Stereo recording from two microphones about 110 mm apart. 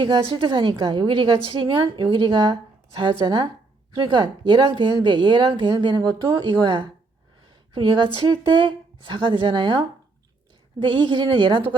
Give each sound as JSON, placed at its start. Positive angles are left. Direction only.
{"t": 0.0, "sound": "a woman's voice", "side_deg": -50}
{"t": 10.8, "sound": "a woman's voice", "side_deg": -45}